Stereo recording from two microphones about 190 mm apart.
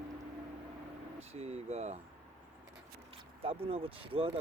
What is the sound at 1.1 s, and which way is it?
Speech, 35° right (ahead or behind).